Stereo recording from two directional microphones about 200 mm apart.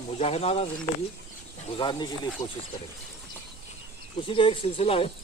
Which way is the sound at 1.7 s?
25° left (ahead or behind).